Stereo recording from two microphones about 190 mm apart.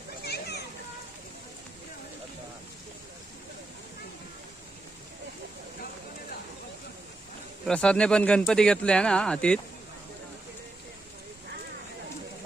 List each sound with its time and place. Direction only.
0.3 s children playing: 60° left (ahead or behind)
7.6 s speech: 5° left (ahead or behind)